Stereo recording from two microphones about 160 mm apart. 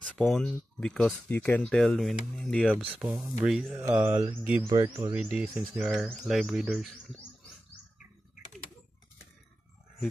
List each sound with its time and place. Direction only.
0.2 s speech: 5° left (ahead or behind)
2.7 s speech: 10° right (ahead or behind)
4.6 s speech: 30° right (ahead or behind)
5.1 s speech: 5° right (ahead or behind)